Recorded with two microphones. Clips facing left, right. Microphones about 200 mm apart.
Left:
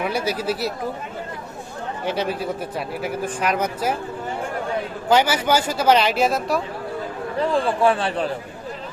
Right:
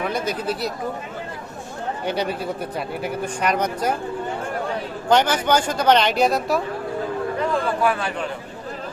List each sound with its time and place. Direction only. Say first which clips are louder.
0.0 s speech: left 1 dB; 10° left (ahead or behind)
2.0 s speech: left 1 dB; centre (ahead or behind)
5.0 s speech: even; 5° left (ahead or behind)
7.3 s a man's voice: left 5 dB; 30° left (ahead or behind)